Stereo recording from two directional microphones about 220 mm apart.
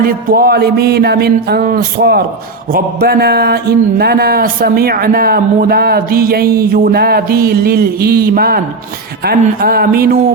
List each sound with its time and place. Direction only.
0.0 s speech: 45° right (ahead or behind)